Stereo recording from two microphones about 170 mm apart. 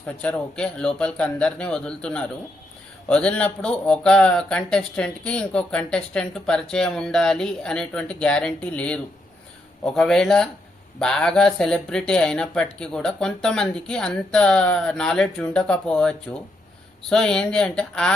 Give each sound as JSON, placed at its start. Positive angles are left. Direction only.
{"t": 0.2, "sound": "speech", "side_deg": 5}